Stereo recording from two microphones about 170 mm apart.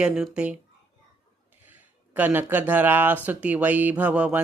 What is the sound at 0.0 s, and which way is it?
Speech, 5° right (ahead or behind).